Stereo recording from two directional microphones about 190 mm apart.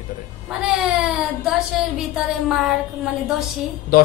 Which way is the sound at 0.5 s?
5° right (ahead or behind).